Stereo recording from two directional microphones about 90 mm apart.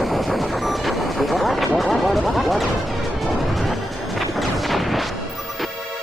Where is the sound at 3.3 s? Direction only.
Centre (ahead or behind).